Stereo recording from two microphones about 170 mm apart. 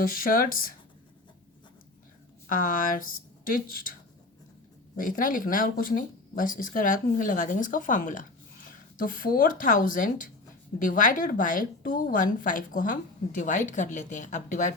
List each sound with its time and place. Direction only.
0.0 s speech: 55° left (ahead or behind)
2.5 s a woman's voice: 55° left (ahead or behind)
4.9 s a woman's voice: 55° left (ahead or behind)